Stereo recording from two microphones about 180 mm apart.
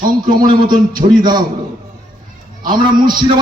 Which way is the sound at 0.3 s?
25° right (ahead or behind).